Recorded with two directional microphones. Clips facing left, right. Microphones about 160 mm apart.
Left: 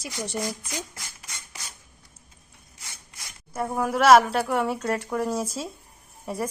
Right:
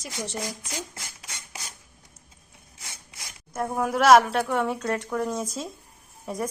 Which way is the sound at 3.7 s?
Centre (ahead or behind).